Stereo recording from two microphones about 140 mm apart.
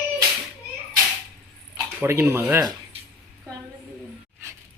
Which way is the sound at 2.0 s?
20° right (ahead or behind).